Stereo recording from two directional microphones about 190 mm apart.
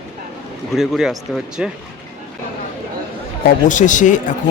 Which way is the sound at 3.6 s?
40° left (ahead or behind).